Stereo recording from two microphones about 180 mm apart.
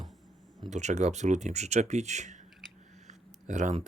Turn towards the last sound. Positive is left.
turn(degrees=-40)  # may be behind; listen again after turning